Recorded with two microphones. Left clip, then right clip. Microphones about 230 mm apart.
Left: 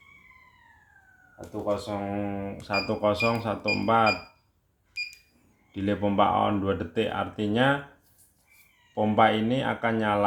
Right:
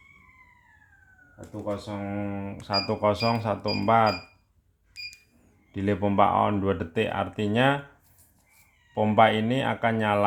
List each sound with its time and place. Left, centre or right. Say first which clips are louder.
1.6 s speech: left 3 dB; right
5.7 s speech: right 1 dB; right
9.0 s speech: right 2 dB; right